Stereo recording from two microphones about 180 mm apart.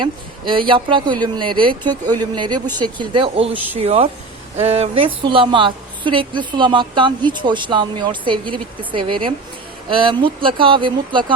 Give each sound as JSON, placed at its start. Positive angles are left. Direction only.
{"t": 0.0, "sound": "a woman's voice", "side_deg": -25}
{"t": 3.5, "sound": "speech", "side_deg": -10}
{"t": 3.8, "sound": "a woman's voice", "side_deg": -35}